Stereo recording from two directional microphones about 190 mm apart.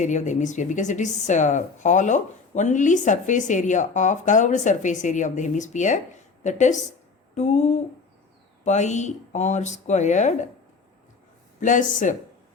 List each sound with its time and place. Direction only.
0.0 s speech: 40° left (ahead or behind)
11.6 s speech: 40° left (ahead or behind)